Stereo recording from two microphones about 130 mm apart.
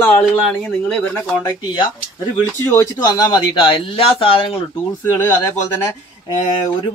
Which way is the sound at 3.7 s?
45° left (ahead or behind).